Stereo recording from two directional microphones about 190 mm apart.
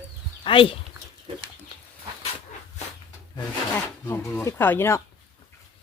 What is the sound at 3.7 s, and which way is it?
Speech, 10° left (ahead or behind).